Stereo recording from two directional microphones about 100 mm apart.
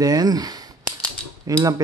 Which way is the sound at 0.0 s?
40° right (ahead or behind).